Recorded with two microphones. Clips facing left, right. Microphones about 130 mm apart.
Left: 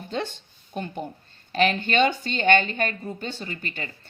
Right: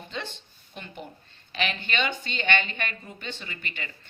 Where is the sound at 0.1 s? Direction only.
45° left (ahead or behind).